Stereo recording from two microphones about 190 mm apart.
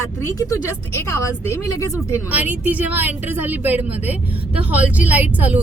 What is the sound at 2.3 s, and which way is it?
A woman's voice, 10° right (ahead or behind).